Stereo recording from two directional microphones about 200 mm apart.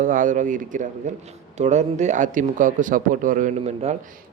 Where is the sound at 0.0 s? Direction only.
40° right (ahead or behind).